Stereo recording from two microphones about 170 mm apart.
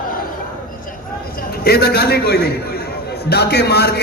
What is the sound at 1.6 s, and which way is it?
Speech, 65° left (ahead or behind).